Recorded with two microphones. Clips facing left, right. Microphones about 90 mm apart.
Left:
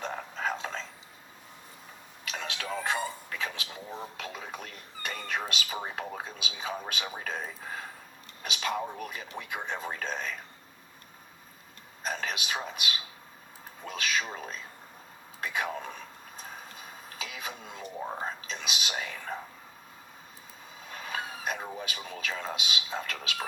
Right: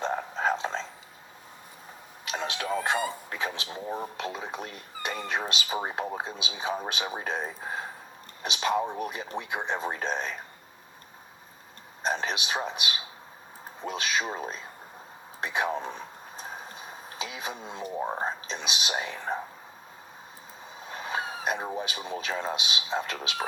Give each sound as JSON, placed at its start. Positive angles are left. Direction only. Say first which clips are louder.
{"t": 0.0, "sound": "a sound", "louder": "right 5 dB", "side_deg": -25}
{"t": 2.2, "sound": "speech", "louder": "right 5 dB", "side_deg": -25}
{"t": 3.8, "sound": "speech", "louder": "right 8 dB", "side_deg": -50}
{"t": 4.2, "sound": "speech", "louder": "right 5 dB", "side_deg": -25}
{"t": 12.0, "sound": "speech", "louder": "right 4 dB", "side_deg": -25}
{"t": 20.7, "sound": "speech", "louder": "right 4 dB", "side_deg": -25}